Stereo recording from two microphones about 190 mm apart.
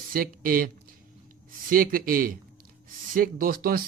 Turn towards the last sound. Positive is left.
turn(degrees=-50)  # may be behind; listen again after turning